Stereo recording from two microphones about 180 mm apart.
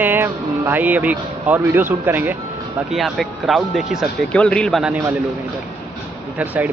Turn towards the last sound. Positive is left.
turn(degrees=-10)  # may be behind; listen again after turning